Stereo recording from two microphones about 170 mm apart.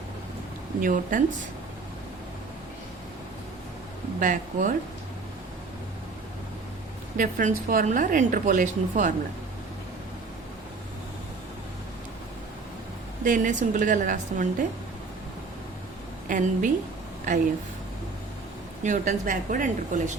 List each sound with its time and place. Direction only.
0.8 s speech: 50° right (ahead or behind)
4.2 s speech: 50° right (ahead or behind)
7.2 s speech: 55° right (ahead or behind)
13.2 s speech: 50° right (ahead or behind)
16.3 s speech: 50° right (ahead or behind)
18.8 s speech: 45° right (ahead or behind)